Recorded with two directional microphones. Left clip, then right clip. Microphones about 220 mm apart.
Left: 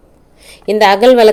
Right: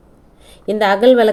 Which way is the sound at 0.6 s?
15° left (ahead or behind).